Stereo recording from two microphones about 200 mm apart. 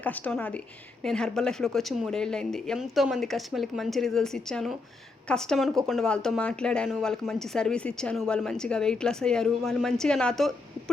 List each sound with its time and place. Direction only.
0.0 s a woman's voice: 10° left (ahead or behind)